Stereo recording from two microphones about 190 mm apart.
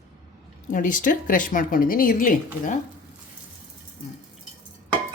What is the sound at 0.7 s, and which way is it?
Speech, 45° left (ahead or behind).